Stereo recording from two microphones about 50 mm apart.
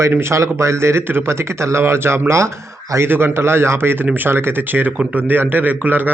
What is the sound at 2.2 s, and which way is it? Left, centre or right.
Speech, right.